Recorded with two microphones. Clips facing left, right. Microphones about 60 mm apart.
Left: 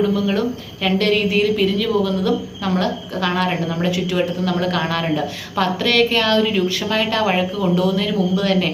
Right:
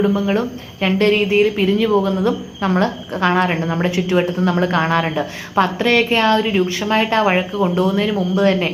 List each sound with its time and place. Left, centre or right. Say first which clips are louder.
0.2 s a woman's voice: right 1 dB; right